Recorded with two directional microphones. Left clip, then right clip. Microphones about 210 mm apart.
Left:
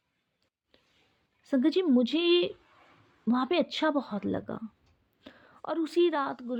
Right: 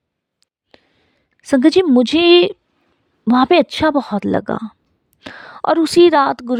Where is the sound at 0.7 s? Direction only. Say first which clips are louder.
Right 16 dB; 55° right (ahead or behind).